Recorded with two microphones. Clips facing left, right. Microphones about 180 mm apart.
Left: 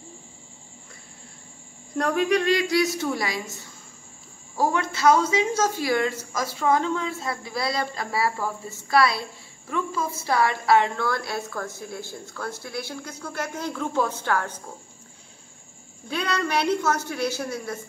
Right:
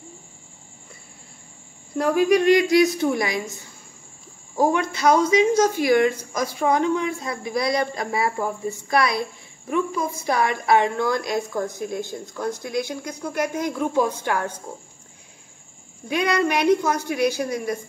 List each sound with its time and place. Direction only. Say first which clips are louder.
2.0 s a woman's voice: right 4 dB; 5° right (ahead or behind)
4.6 s a woman's voice: right 4 dB; 15° right (ahead or behind)
16.1 s a woman's voice: right 5 dB; 15° right (ahead or behind)